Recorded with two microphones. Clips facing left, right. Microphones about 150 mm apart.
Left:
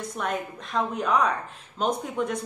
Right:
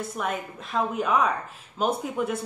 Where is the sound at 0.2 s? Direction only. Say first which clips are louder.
Left 2 dB; 5° right (ahead or behind).